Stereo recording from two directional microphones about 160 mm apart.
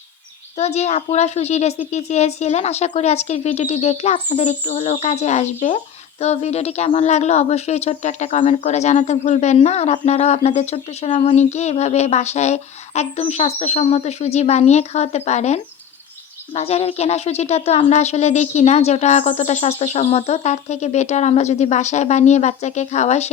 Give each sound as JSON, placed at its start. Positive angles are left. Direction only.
{"t": 0.5, "sound": "speech", "side_deg": 45}